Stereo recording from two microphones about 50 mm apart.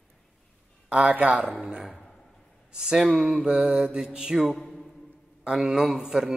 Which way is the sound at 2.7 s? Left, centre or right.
Centre.